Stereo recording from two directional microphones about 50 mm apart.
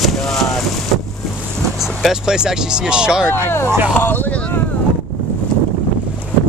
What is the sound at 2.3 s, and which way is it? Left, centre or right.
Speech, centre.